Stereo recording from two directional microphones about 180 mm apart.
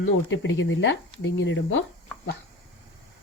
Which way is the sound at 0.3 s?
90° left.